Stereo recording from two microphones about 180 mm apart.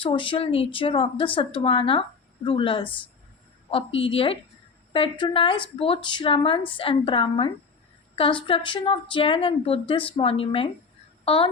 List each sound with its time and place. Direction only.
0.0 s a woman's voice: 30° left (ahead or behind)